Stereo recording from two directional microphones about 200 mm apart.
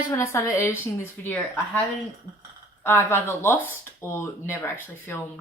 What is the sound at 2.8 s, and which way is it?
A woman's voice, 10° left (ahead or behind).